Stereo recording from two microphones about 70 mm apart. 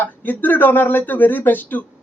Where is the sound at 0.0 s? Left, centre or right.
Left.